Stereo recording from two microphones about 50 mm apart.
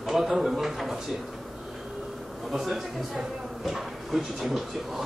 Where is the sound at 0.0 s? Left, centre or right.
Centre.